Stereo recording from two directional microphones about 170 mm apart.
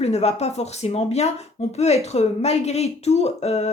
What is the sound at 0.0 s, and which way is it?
Speech, 40° left (ahead or behind).